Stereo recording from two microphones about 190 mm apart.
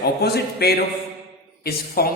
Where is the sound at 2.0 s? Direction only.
55° left (ahead or behind).